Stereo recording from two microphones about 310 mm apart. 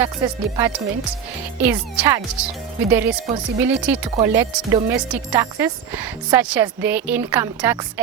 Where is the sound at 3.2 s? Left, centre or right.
Centre.